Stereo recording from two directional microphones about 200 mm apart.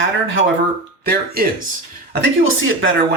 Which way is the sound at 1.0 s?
50° right (ahead or behind).